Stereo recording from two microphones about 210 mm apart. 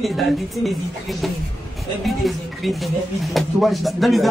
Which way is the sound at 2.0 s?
Centre (ahead or behind).